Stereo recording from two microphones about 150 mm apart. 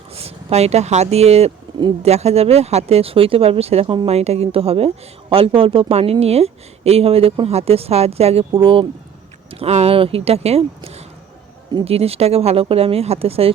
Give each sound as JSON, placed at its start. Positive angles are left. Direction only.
{"t": 0.1, "sound": "a woman's voice", "side_deg": -40}